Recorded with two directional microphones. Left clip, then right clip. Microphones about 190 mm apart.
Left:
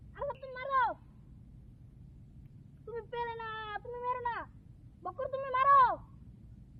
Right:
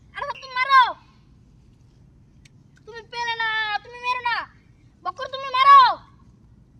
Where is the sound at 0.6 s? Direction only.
25° right (ahead or behind).